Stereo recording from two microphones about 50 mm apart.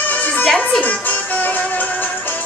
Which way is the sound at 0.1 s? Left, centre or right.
Left.